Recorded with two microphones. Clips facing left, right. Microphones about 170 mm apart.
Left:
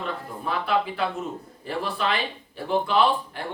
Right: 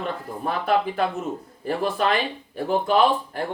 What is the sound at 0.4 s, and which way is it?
Speech, 45° right (ahead or behind).